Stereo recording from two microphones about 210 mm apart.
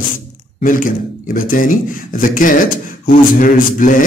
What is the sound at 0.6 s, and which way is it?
A man's voice, 40° left (ahead or behind).